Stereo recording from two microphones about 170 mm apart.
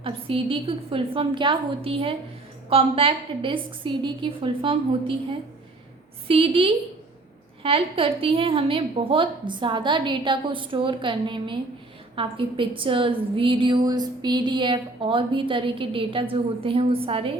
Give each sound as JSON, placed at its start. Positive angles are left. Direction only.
{"t": 0.0, "sound": "a woman's voice", "side_deg": -30}